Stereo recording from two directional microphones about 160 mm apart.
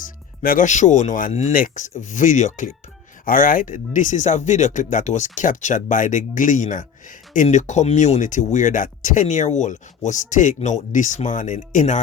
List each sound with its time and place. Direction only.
0.4 s speech: 55° left (ahead or behind)